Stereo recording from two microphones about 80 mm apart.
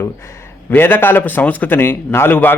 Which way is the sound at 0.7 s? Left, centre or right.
Left.